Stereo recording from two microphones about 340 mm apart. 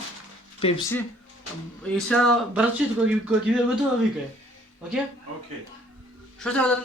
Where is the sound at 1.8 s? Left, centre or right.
Centre.